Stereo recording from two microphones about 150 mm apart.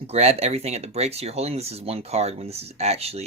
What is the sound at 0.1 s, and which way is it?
Speech, 45° right (ahead or behind).